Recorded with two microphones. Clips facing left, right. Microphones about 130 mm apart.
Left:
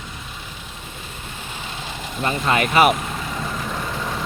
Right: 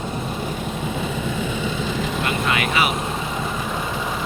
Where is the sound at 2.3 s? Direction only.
40° left (ahead or behind).